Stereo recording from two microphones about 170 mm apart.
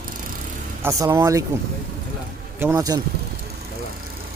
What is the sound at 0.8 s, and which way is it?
Speech, 15° right (ahead or behind).